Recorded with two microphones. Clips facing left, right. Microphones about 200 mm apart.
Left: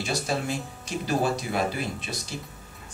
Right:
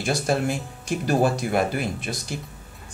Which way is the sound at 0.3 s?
50° right (ahead or behind).